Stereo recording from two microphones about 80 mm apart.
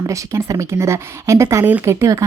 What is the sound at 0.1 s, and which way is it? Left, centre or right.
A woman's voice, right.